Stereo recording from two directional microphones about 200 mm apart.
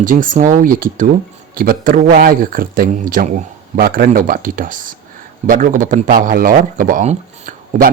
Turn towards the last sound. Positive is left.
turn(degrees=-40)  # may be behind; listen again after turning